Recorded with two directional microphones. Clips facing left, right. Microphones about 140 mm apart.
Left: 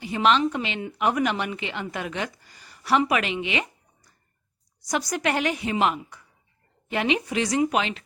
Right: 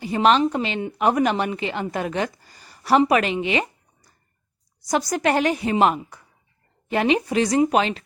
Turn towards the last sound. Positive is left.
turn(degrees=-40)  # may be behind; listen again after turning